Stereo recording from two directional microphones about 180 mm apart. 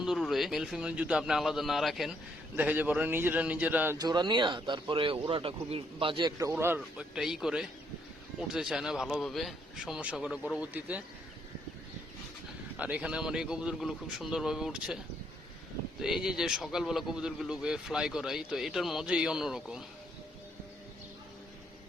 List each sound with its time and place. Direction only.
0.0 s a man's voice: centre (ahead or behind)
3.9 s speech: 25° right (ahead or behind)
6.5 s a man's voice: 10° right (ahead or behind)
12.7 s a man's voice: 5° right (ahead or behind)
16.0 s a man's voice: 5° right (ahead or behind)